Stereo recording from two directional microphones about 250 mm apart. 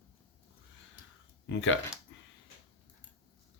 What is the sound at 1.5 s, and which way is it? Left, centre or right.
Speech, left.